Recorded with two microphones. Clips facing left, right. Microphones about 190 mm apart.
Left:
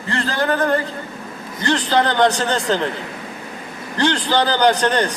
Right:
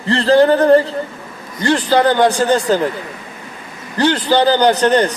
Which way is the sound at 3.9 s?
15° right (ahead or behind).